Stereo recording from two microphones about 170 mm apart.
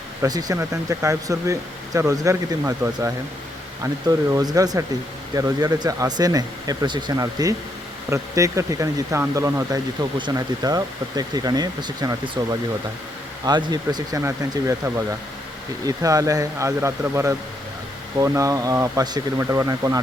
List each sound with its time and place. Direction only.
0.2 s speech: 20° right (ahead or behind)